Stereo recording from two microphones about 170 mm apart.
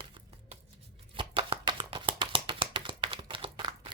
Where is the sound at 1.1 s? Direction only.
30° right (ahead or behind).